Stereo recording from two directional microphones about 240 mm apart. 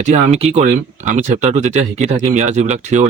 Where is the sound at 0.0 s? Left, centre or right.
Right.